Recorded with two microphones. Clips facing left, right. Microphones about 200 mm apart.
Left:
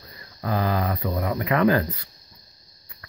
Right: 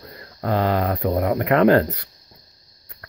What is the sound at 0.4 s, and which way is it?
Speech, 65° right (ahead or behind).